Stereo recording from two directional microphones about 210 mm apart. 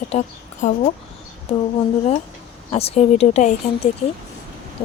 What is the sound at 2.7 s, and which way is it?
Speech, 30° left (ahead or behind).